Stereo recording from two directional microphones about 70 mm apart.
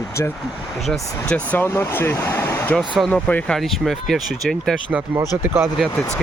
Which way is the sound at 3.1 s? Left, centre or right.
Centre.